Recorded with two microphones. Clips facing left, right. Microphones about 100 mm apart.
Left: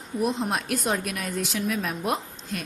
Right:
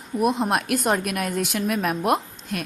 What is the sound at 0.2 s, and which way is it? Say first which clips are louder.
A woman's voice: right 4 dB; 60° right (ahead or behind).